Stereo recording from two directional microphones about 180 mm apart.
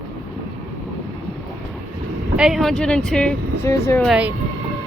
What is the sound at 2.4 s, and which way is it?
Speech, centre (ahead or behind).